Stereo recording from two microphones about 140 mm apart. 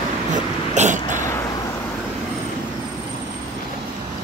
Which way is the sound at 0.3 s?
60° right (ahead or behind).